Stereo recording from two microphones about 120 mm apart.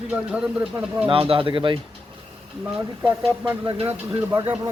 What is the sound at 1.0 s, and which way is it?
Speech, 50° right (ahead or behind).